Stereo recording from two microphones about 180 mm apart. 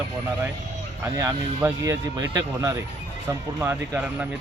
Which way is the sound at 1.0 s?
15° right (ahead or behind).